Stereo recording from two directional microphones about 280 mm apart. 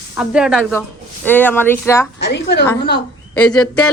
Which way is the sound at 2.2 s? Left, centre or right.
Left.